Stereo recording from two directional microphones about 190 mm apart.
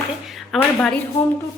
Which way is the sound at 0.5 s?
5° left (ahead or behind).